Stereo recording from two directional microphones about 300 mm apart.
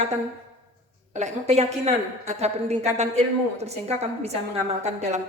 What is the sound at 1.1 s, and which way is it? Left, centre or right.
A woman's voice, right.